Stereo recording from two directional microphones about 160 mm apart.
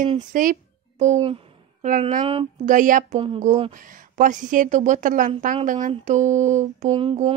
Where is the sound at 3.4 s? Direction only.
45° right (ahead or behind).